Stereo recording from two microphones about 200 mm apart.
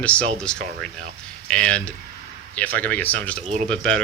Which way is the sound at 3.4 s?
35° right (ahead or behind).